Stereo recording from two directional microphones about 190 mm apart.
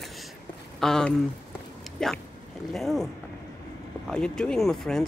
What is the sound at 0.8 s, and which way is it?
Speech, 5° left (ahead or behind).